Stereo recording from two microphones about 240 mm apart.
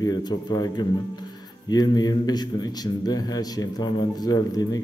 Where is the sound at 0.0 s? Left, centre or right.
Centre.